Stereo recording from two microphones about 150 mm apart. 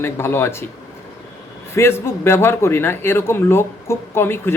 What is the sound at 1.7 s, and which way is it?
Speech, 15° left (ahead or behind).